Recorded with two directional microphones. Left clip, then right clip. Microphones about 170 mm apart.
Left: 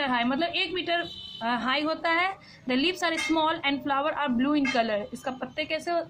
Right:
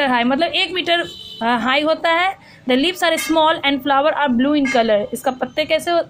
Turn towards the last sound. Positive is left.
turn(degrees=-30)  # may be behind; listen again after turning